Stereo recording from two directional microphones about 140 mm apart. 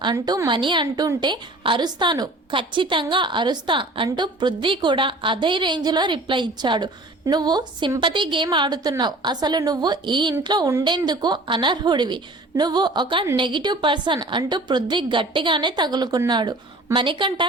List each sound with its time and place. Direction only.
0.0 s a woman's voice: 30° right (ahead or behind)